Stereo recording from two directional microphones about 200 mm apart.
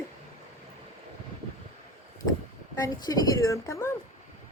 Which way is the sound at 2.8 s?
15° left (ahead or behind).